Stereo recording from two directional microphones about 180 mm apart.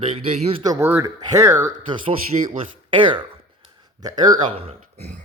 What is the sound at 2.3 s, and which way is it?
Speech, 35° right (ahead or behind).